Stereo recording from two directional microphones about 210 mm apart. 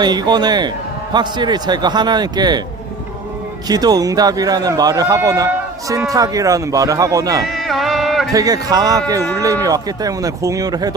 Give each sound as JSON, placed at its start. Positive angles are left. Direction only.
{"t": 0.0, "sound": "a man's voice", "side_deg": -20}
{"t": 3.7, "sound": "speech", "side_deg": -20}
{"t": 7.4, "sound": "a sound", "side_deg": 0}
{"t": 8.3, "sound": "speech", "side_deg": -15}